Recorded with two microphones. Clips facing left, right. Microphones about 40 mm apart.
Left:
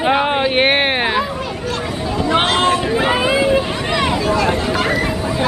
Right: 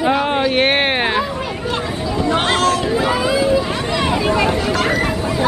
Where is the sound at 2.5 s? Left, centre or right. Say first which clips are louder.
Left 1 dB; left.